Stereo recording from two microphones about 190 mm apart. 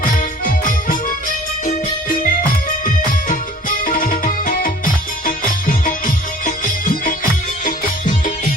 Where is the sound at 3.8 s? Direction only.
45° left (ahead or behind).